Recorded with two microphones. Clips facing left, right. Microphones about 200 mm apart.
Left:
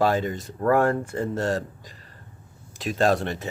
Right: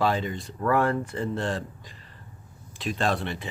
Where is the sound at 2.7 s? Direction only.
45° left (ahead or behind).